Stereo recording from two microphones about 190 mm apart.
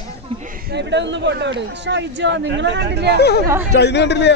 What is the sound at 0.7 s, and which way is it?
Speech, 65° right (ahead or behind).